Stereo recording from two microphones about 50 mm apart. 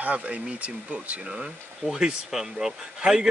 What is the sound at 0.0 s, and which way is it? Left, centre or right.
Speech, right.